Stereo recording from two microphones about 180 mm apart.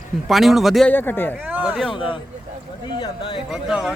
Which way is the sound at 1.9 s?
30° left (ahead or behind).